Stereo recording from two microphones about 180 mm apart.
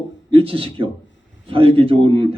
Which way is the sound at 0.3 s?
30° right (ahead or behind).